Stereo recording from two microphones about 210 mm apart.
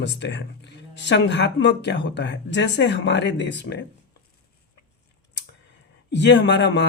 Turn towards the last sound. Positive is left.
turn(degrees=55)  # may be behind; listen again after turning